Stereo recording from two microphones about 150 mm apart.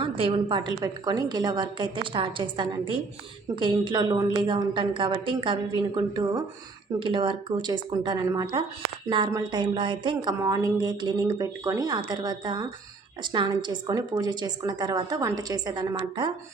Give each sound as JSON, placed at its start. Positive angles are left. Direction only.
{"t": 0.0, "sound": "a woman's voice", "side_deg": -35}